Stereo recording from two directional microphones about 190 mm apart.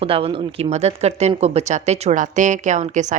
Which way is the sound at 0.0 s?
30° right (ahead or behind).